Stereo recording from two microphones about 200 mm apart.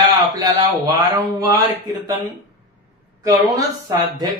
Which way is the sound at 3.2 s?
15° right (ahead or behind).